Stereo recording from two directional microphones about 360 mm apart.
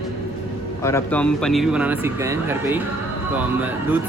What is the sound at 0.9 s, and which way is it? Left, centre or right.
Speech, centre.